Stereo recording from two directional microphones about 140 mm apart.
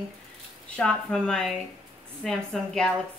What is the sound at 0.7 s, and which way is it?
A woman's voice, 5° left (ahead or behind).